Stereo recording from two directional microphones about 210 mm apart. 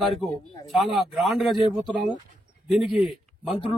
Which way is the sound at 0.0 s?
Centre (ahead or behind).